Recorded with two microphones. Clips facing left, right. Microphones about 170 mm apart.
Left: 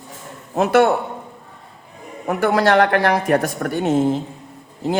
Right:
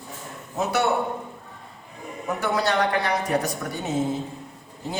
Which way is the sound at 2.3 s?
85° left.